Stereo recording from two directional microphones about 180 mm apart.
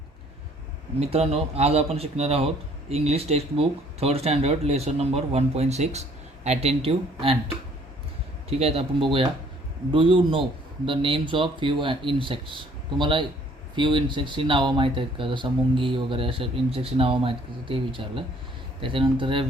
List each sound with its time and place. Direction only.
0.9 s speech: 35° right (ahead or behind)